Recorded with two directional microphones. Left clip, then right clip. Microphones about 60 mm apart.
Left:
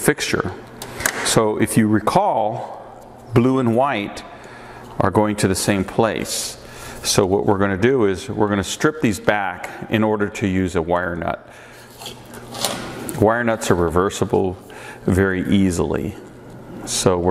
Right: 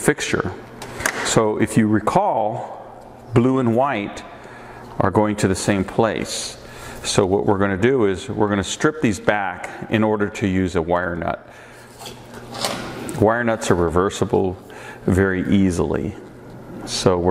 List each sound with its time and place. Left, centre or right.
0.0 s speech: centre
9.6 s speech: centre
12.5 s a sound: left
13.0 s speech: centre